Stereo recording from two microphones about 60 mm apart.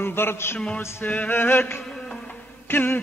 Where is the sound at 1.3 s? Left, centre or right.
Left.